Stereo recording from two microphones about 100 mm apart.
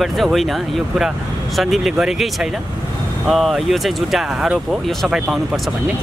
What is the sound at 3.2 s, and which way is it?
Speech, centre (ahead or behind).